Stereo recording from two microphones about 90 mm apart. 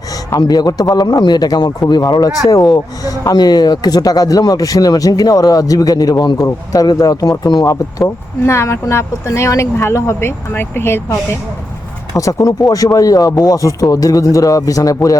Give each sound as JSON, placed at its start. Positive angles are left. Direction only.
{"t": 0.3, "sound": "a man's voice", "side_deg": 45}
{"t": 12.1, "sound": "speech", "side_deg": 40}